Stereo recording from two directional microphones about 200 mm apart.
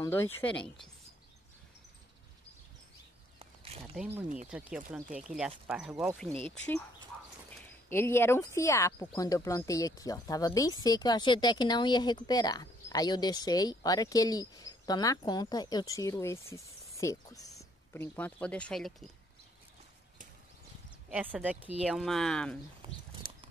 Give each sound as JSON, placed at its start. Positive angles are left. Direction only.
{"t": 0.0, "sound": "speech", "side_deg": 10}
{"t": 3.3, "sound": "a sound", "side_deg": -30}
{"t": 4.5, "sound": "speech", "side_deg": -5}
{"t": 7.5, "sound": "speech", "side_deg": 10}
{"t": 21.1, "sound": "speech", "side_deg": -10}
{"t": 22.8, "sound": "a sound", "side_deg": -25}